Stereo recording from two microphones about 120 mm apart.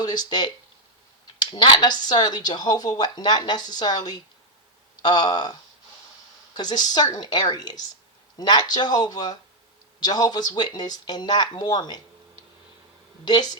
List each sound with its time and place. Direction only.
0.0 s a woman's voice: 35° left (ahead or behind)
6.6 s a woman's voice: 35° left (ahead or behind)
13.2 s a woman's voice: 35° left (ahead or behind)